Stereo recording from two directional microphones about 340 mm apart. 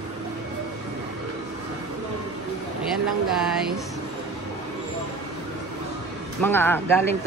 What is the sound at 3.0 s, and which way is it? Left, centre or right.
Speech, centre.